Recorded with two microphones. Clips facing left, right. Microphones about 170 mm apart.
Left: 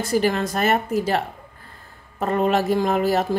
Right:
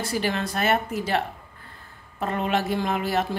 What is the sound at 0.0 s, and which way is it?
A woman's voice, 45° left (ahead or behind).